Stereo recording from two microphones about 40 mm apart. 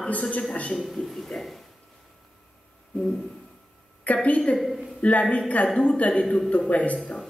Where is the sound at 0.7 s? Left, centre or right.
Centre.